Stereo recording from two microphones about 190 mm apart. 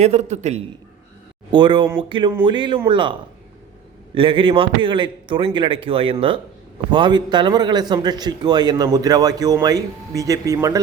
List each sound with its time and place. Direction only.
0.0 s a man's voice: 35° right (ahead or behind)
1.5 s speech: 25° right (ahead or behind)